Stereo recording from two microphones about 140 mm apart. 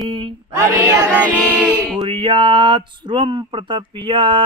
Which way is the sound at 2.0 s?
35° right (ahead or behind).